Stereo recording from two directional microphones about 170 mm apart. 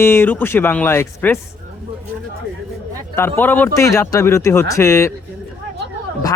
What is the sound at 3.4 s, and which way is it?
Speech, 10° left (ahead or behind).